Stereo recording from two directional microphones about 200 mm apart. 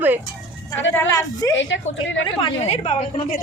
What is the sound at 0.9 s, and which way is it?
Speech, 15° left (ahead or behind).